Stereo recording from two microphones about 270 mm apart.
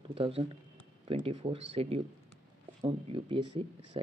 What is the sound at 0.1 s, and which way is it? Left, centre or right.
Speech, centre.